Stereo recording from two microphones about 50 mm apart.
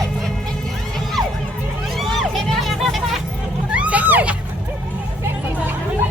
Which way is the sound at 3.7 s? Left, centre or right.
Right.